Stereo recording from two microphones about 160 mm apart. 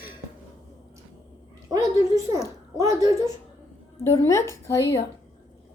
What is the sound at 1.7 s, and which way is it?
A woman's voice, 20° right (ahead or behind).